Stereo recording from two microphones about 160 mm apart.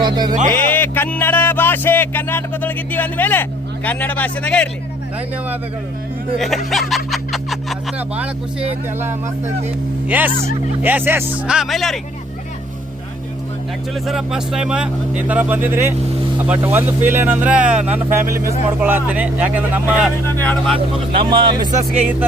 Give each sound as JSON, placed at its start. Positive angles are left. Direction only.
{"t": 0.0, "sound": "speech", "side_deg": -25}
{"t": 0.5, "sound": "speech", "side_deg": 15}
{"t": 6.4, "sound": "speech", "side_deg": 0}
{"t": 13.9, "sound": "speech", "side_deg": 0}
{"t": 20.4, "sound": "speech", "side_deg": 10}
{"t": 20.7, "sound": "speech", "side_deg": -30}